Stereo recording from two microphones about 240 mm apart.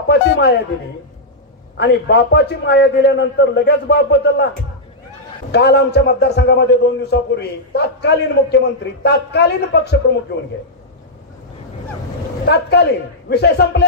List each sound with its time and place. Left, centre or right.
0.1 s a man's voice: left
1.8 s a man's voice: left
5.5 s a man's voice: left
12.4 s a man's voice: left